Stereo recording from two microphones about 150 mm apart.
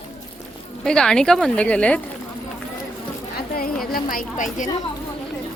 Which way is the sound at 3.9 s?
65° left (ahead or behind).